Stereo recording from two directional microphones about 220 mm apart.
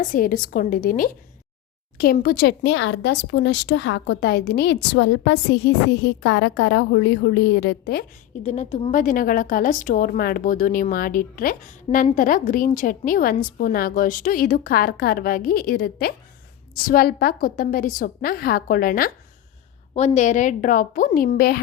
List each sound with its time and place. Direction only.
0.0 s a woman's voice: 40° left (ahead or behind)
2.7 s a woman's voice: 55° left (ahead or behind)
8.4 s a woman's voice: 30° left (ahead or behind)